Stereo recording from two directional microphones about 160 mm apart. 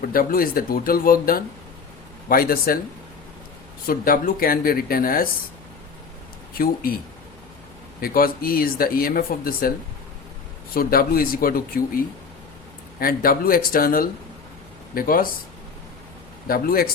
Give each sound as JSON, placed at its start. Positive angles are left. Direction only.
{"t": 0.0, "sound": "speech", "side_deg": 65}
{"t": 3.8, "sound": "speech", "side_deg": 65}
{"t": 6.6, "sound": "speech", "side_deg": 65}
{"t": 8.0, "sound": "speech", "side_deg": 65}
{"t": 10.8, "sound": "speech", "side_deg": 65}
{"t": 16.5, "sound": "speech", "side_deg": 65}